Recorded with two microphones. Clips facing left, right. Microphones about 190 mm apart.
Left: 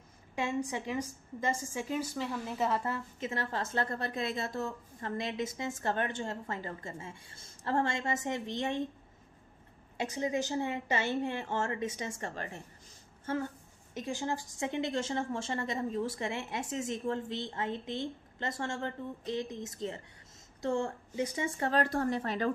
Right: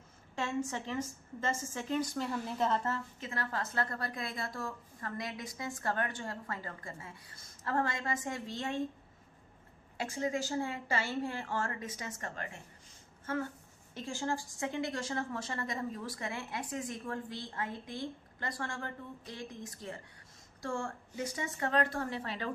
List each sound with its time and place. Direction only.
0.4 s a woman's voice: 15° left (ahead or behind)
10.0 s a woman's voice: 20° left (ahead or behind)
13.9 s a woman's voice: 20° left (ahead or behind); by 22.5 s 45° left (ahead or behind)